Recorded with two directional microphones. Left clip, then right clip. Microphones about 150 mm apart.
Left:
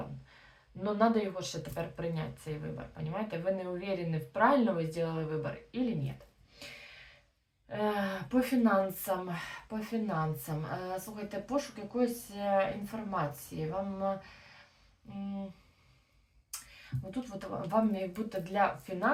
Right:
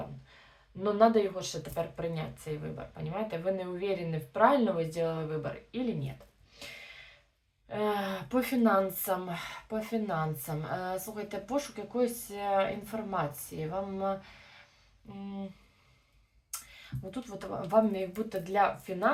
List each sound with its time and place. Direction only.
0.8 s speech: 20° right (ahead or behind)
7.7 s speech: 20° right (ahead or behind)
17.7 s speech: 20° right (ahead or behind)